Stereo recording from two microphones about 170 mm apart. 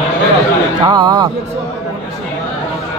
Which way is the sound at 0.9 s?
25° right (ahead or behind).